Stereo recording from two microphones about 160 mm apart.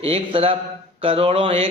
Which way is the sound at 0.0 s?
35° right (ahead or behind).